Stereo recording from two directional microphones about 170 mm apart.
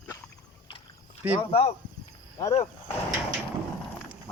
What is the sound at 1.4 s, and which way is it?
Speech, 30° left (ahead or behind).